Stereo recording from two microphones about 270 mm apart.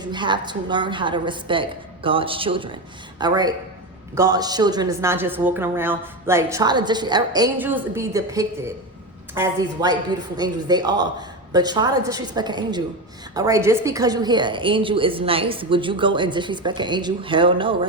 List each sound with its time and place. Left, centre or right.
0.0 s a woman's voice: centre